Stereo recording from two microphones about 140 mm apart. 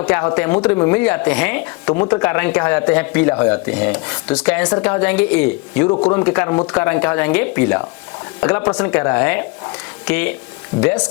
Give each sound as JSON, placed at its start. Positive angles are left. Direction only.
{"t": 0.0, "sound": "speech", "side_deg": 10}
{"t": 0.3, "sound": "rub", "side_deg": 10}
{"t": 2.1, "sound": "speech", "side_deg": 25}
{"t": 2.4, "sound": "rub", "side_deg": 10}